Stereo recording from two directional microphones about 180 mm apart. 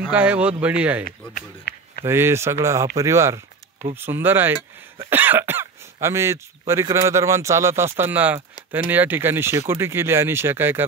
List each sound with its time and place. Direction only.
0.0 s speech: 10° right (ahead or behind)
1.3 s run: 55° left (ahead or behind)
2.0 s speech: 15° right (ahead or behind)